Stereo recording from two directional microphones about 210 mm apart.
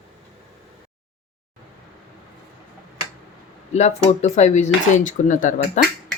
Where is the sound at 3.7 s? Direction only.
30° left (ahead or behind).